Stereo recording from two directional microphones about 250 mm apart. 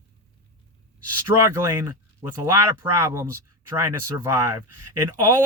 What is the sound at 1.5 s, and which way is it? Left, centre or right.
Speech, centre.